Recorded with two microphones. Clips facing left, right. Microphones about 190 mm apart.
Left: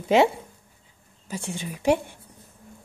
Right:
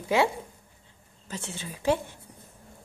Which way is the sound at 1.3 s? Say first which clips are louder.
Left 5 dB; 10° left (ahead or behind).